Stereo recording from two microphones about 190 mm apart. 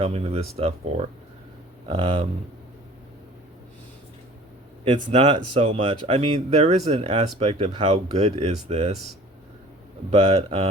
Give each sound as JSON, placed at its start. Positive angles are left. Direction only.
{"t": 0.0, "sound": "speech", "side_deg": -30}
{"t": 4.9, "sound": "speech", "side_deg": -30}
{"t": 10.1, "sound": "speech", "side_deg": -30}